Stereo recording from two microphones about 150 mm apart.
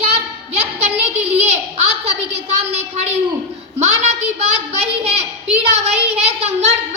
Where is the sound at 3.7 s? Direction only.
45° right (ahead or behind).